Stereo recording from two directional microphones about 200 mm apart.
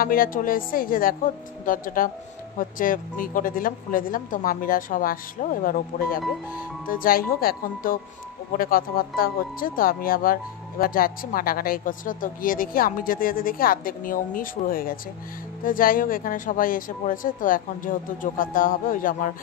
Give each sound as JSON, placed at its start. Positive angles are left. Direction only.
{"t": 0.0, "sound": "speech", "side_deg": 45}